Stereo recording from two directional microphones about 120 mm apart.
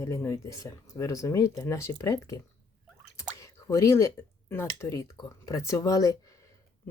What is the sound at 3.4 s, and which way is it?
Speech, 25° left (ahead or behind).